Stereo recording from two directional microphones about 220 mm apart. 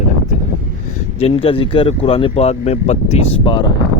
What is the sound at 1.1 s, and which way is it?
Speech, 25° left (ahead or behind).